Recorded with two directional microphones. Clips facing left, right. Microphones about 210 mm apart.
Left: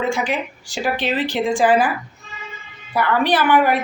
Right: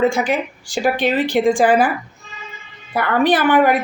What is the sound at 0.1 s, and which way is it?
A woman's voice, 50° right (ahead or behind).